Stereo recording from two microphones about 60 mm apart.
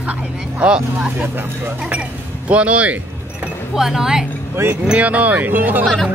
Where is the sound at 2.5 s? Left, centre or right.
Right.